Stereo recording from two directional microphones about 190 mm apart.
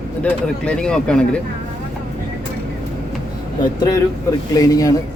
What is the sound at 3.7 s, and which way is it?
A man's voice, 20° left (ahead or behind).